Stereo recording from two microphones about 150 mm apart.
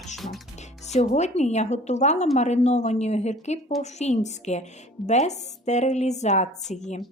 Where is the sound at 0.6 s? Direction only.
50° left (ahead or behind).